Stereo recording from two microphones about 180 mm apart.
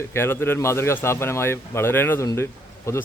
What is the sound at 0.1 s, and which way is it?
Speech, 10° left (ahead or behind).